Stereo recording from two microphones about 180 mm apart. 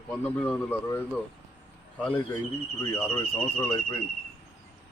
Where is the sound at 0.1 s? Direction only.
5° left (ahead or behind).